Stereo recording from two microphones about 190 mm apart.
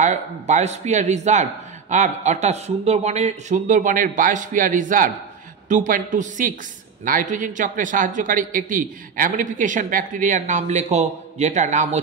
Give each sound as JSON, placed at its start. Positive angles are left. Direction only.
{"t": 0.0, "sound": "a man's voice", "side_deg": -40}